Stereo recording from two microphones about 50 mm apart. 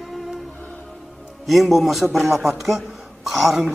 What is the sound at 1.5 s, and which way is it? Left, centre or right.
A man's voice, centre.